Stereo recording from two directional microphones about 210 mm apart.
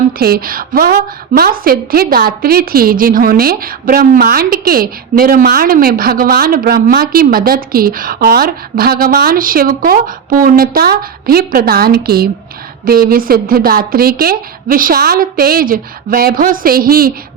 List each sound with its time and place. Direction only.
0.2 s a woman's voice: 45° right (ahead or behind)